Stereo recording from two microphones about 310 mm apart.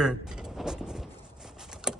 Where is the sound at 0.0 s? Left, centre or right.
Centre.